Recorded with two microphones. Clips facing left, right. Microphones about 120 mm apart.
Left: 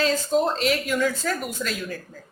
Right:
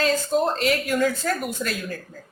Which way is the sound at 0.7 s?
45° right (ahead or behind).